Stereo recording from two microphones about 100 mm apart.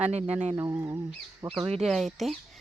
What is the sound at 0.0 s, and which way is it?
Speech, 90° right.